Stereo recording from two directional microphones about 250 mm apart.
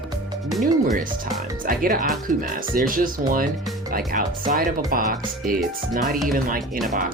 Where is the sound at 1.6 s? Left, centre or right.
Right.